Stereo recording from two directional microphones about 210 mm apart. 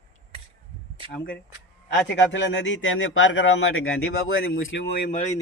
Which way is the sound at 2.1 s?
60° left (ahead or behind).